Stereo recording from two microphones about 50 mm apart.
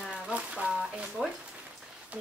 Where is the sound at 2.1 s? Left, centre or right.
Right.